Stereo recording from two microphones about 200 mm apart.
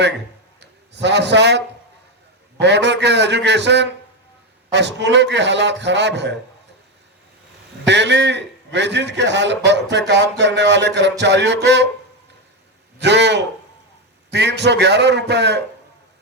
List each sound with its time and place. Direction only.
0.6 s a man's voice: 60° right (ahead or behind)
7.9 s speech: 60° right (ahead or behind)
13.0 s speech: 60° right (ahead or behind)